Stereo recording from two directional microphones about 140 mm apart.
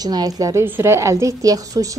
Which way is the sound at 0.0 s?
30° right (ahead or behind).